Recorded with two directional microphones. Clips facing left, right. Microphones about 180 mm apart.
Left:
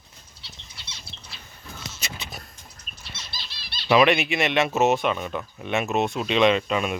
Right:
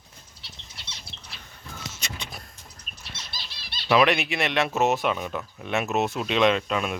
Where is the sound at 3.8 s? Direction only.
Centre (ahead or behind).